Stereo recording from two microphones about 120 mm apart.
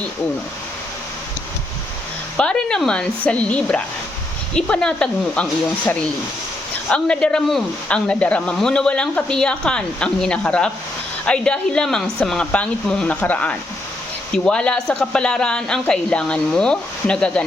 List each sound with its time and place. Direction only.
2.4 s speech: 5° left (ahead or behind)